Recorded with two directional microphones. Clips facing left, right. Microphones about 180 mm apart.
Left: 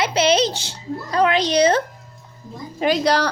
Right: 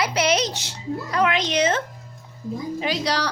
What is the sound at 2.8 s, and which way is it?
Speech, 50° left (ahead or behind).